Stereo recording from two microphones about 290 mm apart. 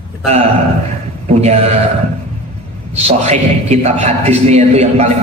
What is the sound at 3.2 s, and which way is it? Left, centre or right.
A man's voice, right.